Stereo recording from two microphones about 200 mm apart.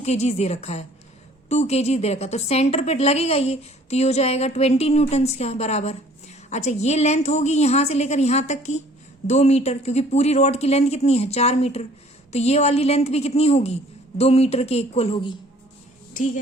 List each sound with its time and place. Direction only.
0.0 s a woman's voice: 35° left (ahead or behind)